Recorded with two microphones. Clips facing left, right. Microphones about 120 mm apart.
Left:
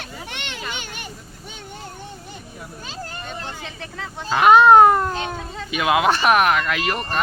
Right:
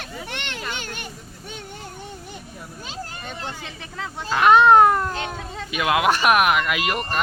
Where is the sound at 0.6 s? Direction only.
5° left (ahead or behind).